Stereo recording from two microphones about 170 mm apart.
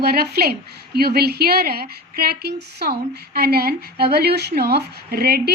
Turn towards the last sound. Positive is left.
turn(degrees=-65)  # may be behind; listen again after turning